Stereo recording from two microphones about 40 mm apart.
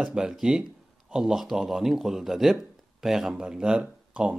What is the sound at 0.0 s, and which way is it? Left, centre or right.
A man's voice, centre.